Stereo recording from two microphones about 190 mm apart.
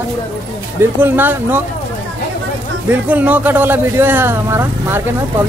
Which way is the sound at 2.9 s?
10° right (ahead or behind).